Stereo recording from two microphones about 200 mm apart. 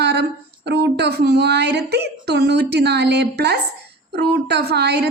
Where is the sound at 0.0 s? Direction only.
55° right (ahead or behind).